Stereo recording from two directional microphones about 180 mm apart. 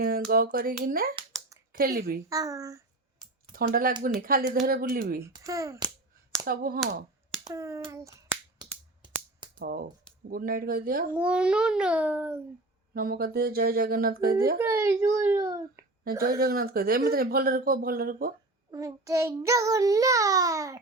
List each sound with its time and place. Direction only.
0.0 s a woman's voice: 55° right (ahead or behind)
2.3 s child singing: 20° right (ahead or behind)
3.5 s speech: 55° right (ahead or behind)
5.2 s child singing: 20° right (ahead or behind)
6.4 s speech: 55° right (ahead or behind)
7.4 s a child's voice: 15° right (ahead or behind)
9.6 s speech: 55° right (ahead or behind)
11.2 s a child's voice: 5° right (ahead or behind)
12.9 s speech: 55° right (ahead or behind)
14.6 s a child's voice: 15° right (ahead or behind)
16.1 s speech: 55° right (ahead or behind)
18.7 s child singing: 20° right (ahead or behind)